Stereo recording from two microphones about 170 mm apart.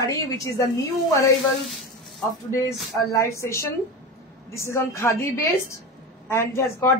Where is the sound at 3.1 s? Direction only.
15° left (ahead or behind).